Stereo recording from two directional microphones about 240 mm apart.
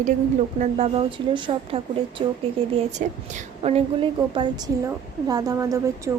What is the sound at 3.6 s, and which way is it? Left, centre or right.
A woman's voice, right.